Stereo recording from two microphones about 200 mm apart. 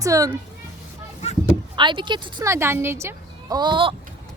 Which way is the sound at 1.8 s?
25° right (ahead or behind).